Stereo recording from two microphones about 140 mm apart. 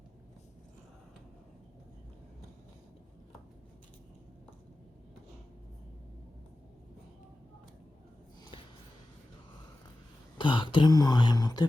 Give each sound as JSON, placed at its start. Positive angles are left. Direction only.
{"t": 10.3, "sound": "speech", "side_deg": 35}